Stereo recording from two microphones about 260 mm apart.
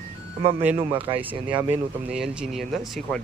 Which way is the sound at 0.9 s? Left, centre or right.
Right.